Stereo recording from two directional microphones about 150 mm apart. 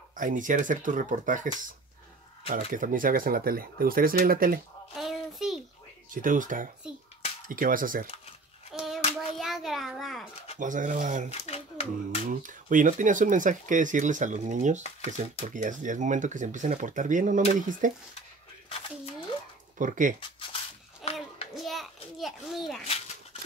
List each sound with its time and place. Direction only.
0.1 s speech: 60° right (ahead or behind)
2.5 s speech: 65° right (ahead or behind)
4.9 s child singing: centre (ahead or behind)
6.1 s speech: 60° right (ahead or behind)
8.7 s hands: centre (ahead or behind)
9.4 s a sound: centre (ahead or behind)
10.6 s speech: 60° right (ahead or behind)
11.2 s a sound: 45° left (ahead or behind)
12.3 s speech: 60° right (ahead or behind)
19.8 s speech: 60° right (ahead or behind)
21.0 s a sound: centre (ahead or behind)